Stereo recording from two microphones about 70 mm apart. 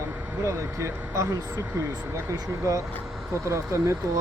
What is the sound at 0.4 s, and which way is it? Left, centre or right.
Speech, right.